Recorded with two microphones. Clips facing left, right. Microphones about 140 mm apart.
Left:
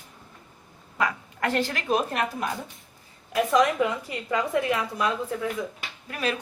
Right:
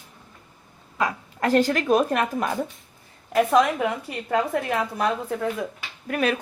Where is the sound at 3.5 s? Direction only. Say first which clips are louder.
Left 1 dB; 60° right (ahead or behind).